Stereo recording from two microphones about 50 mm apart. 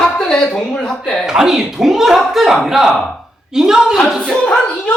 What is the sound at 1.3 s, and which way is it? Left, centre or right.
Speech, centre.